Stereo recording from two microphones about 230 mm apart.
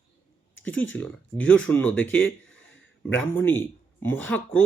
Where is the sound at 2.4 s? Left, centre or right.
Left.